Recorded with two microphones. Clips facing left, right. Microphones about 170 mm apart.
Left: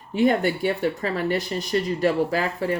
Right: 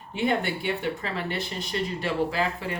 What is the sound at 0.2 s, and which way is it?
Speech, 40° left (ahead or behind).